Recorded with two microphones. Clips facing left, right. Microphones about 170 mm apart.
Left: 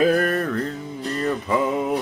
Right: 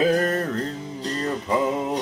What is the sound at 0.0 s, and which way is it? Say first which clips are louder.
Music: left 2 dB; 25° right (ahead or behind).